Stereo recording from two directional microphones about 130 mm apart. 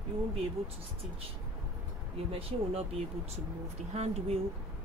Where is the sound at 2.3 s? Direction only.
50° right (ahead or behind).